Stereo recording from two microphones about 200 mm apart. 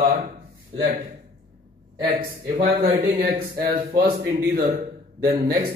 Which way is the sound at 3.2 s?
50° right (ahead or behind).